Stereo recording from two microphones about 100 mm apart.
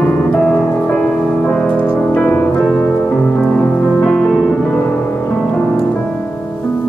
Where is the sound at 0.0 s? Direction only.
10° left (ahead or behind).